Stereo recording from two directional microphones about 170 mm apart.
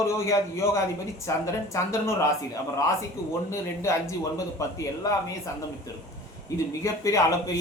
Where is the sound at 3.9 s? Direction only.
15° left (ahead or behind).